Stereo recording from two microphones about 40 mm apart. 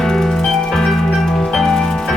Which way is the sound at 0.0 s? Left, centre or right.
Centre.